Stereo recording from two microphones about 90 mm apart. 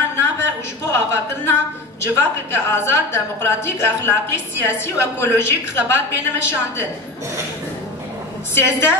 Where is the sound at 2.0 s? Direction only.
25° left (ahead or behind).